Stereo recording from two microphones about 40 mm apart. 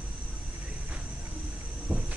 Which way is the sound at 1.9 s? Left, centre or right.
Right.